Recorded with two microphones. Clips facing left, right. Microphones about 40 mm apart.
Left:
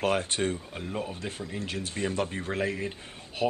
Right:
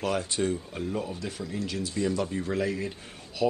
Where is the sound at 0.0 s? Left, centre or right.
Left.